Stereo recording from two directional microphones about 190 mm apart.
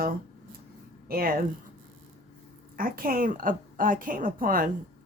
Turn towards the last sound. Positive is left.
turn(degrees=-45)  # may be behind; listen again after turning